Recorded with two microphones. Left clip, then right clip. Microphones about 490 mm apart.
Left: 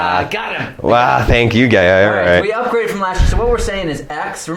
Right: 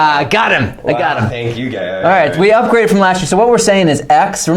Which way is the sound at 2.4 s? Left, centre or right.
Right.